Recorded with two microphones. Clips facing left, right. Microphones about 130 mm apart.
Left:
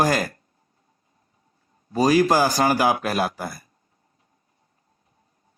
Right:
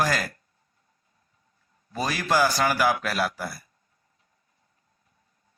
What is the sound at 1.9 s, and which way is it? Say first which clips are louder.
A man's voice: left 8 dB; 40° left (ahead or behind).